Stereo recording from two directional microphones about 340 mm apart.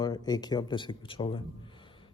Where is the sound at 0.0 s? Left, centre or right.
Centre.